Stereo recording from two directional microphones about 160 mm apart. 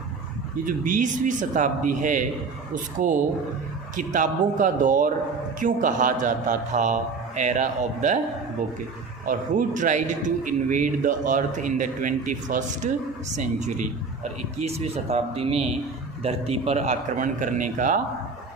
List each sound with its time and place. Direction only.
0.6 s a man's voice: 55° right (ahead or behind)
9.2 s a man's voice: 55° right (ahead or behind)